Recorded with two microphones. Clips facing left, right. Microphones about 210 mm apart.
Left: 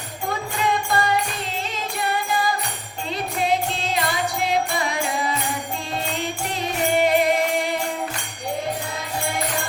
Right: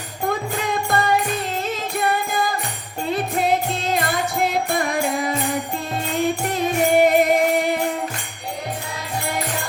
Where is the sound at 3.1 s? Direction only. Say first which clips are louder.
Right 3 dB; 50° right (ahead or behind).